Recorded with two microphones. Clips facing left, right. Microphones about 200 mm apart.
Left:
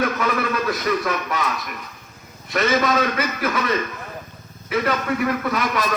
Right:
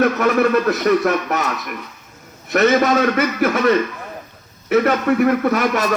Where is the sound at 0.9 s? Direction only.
45° right (ahead or behind).